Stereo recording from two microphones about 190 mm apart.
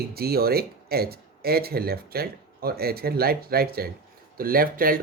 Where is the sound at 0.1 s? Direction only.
55° right (ahead or behind).